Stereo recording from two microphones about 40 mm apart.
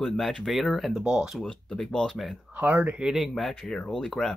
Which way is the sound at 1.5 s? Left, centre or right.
Centre.